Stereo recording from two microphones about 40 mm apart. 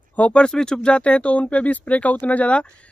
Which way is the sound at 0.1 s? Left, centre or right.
Left.